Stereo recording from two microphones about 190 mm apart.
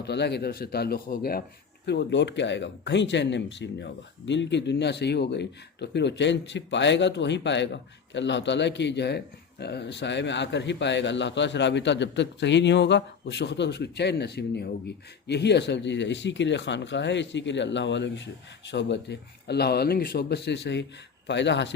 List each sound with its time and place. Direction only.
0.0 s speech: 60° left (ahead or behind)
1.9 s speech: 65° left (ahead or behind)